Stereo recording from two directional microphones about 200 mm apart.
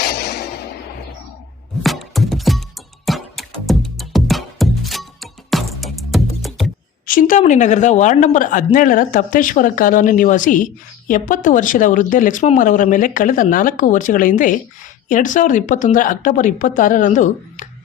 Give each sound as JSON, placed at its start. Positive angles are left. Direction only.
{"t": 0.0, "sound": "music", "side_deg": 55}
{"t": 1.8, "sound": "music", "side_deg": 0}
{"t": 7.0, "sound": "a woman's voice", "side_deg": 45}